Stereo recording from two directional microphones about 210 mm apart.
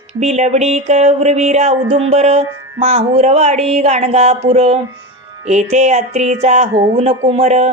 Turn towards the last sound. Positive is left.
turn(degrees=-30)  # may be behind; listen again after turning